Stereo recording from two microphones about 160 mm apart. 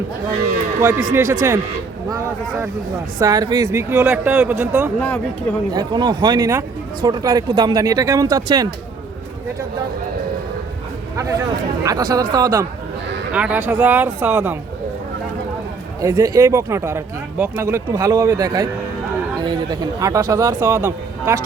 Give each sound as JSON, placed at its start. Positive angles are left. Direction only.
{"t": 1.1, "sound": "speech", "side_deg": -15}
{"t": 4.9, "sound": "speech", "side_deg": 10}
{"t": 5.7, "sound": "speech", "side_deg": -25}
{"t": 11.2, "sound": "speech", "side_deg": -20}
{"t": 13.3, "sound": "speech", "side_deg": -10}
{"t": 16.0, "sound": "speech", "side_deg": -20}